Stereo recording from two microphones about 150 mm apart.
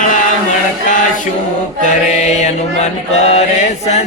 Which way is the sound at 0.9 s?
60° left (ahead or behind).